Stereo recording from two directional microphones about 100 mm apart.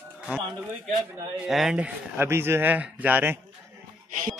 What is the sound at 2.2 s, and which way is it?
Speech, 25° right (ahead or behind).